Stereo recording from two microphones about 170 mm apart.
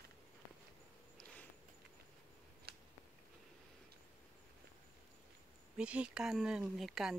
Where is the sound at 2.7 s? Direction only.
65° right (ahead or behind).